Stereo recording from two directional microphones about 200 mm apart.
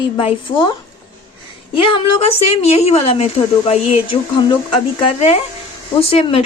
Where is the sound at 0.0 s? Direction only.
25° left (ahead or behind).